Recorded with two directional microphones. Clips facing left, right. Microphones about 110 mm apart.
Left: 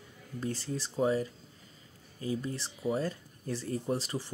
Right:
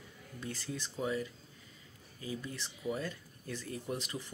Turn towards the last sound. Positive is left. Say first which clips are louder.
# left 6 dB
turn(degrees=35)  # may be behind; listen again after turning